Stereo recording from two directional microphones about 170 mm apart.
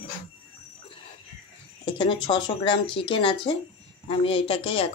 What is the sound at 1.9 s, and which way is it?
Speech, 25° left (ahead or behind).